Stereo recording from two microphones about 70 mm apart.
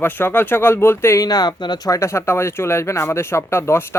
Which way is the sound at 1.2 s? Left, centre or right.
Left.